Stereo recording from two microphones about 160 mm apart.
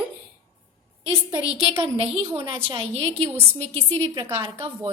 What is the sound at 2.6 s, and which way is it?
A woman's voice, 35° right (ahead or behind).